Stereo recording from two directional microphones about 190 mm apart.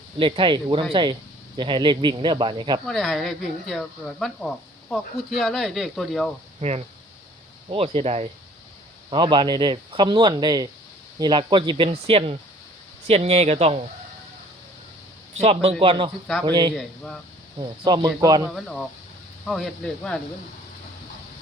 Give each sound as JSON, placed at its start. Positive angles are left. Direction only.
{"t": 0.2, "sound": "speech", "side_deg": -25}
{"t": 2.8, "sound": "speech", "side_deg": 0}
{"t": 6.6, "sound": "speech", "side_deg": -35}
{"t": 15.4, "sound": "speech", "side_deg": -30}
{"t": 16.7, "sound": "speech", "side_deg": 5}
{"t": 17.6, "sound": "speech", "side_deg": -25}
{"t": 18.4, "sound": "speech", "side_deg": 0}